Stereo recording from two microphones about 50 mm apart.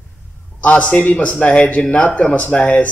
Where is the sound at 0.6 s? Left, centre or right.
Left.